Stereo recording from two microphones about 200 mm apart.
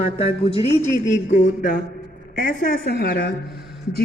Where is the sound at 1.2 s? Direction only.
40° left (ahead or behind).